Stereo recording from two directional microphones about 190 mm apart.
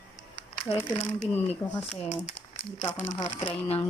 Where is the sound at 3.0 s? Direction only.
25° left (ahead or behind).